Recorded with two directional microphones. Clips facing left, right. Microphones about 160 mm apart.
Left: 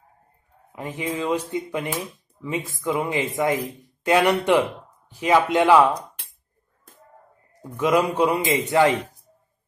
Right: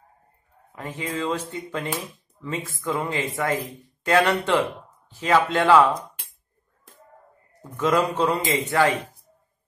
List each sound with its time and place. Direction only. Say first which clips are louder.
0.7 s a man's voice: left 2 dB; 15° left (ahead or behind)
7.6 s a man's voice: left 2 dB; 15° left (ahead or behind)